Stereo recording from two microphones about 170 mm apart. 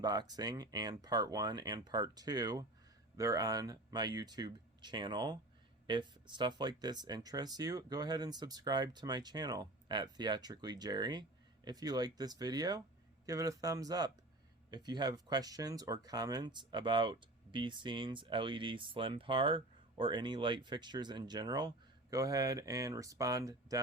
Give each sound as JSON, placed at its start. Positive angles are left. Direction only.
{"t": 0.0, "sound": "speech", "side_deg": -25}